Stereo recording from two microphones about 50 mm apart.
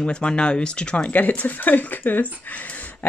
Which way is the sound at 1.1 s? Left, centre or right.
Left.